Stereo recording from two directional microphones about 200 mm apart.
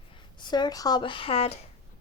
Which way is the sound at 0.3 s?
20° left (ahead or behind).